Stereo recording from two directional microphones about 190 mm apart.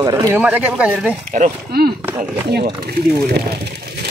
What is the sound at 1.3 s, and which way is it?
Speech, 50° right (ahead or behind).